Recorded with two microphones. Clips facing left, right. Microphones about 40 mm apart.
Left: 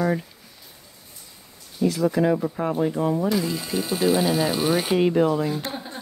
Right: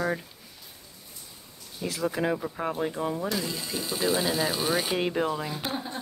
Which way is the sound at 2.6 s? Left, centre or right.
Centre.